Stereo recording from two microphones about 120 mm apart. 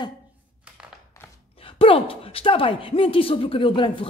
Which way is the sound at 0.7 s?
10° right (ahead or behind).